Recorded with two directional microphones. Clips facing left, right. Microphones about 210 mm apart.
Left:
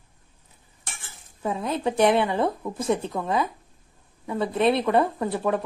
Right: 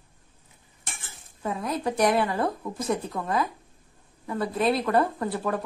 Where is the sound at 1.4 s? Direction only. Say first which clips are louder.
Left 2 dB; 25° left (ahead or behind).